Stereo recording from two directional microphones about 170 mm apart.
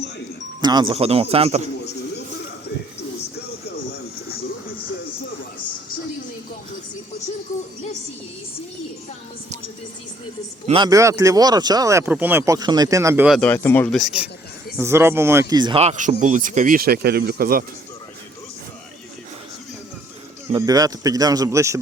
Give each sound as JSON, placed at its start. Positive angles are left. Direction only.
{"t": 0.6, "sound": "speech", "side_deg": -25}
{"t": 10.8, "sound": "speech", "side_deg": -20}
{"t": 13.2, "sound": "speech", "side_deg": 5}
{"t": 14.8, "sound": "speech", "side_deg": -15}
{"t": 20.5, "sound": "speech", "side_deg": -20}